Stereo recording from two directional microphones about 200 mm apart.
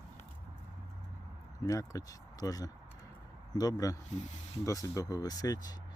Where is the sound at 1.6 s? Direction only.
15° left (ahead or behind).